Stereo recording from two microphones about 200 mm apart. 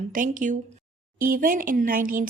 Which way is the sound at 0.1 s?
40° right (ahead or behind).